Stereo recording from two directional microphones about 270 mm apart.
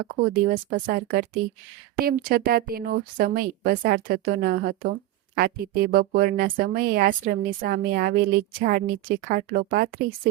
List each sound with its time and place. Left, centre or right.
0.5 s speech: right